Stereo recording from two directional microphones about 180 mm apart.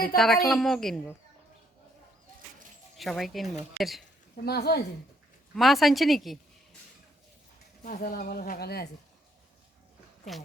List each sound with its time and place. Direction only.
0.2 s speech: centre (ahead or behind)
2.9 s speech: centre (ahead or behind)
4.4 s speech: 60° left (ahead or behind)
5.5 s speech: centre (ahead or behind)
7.9 s speech: 50° left (ahead or behind)